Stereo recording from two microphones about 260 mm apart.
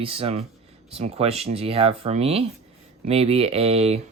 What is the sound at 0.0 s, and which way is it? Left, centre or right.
Speech, right.